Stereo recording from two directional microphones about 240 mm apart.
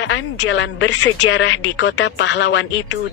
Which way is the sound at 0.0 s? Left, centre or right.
Left.